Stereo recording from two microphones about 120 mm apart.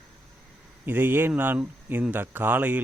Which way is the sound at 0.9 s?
15° right (ahead or behind).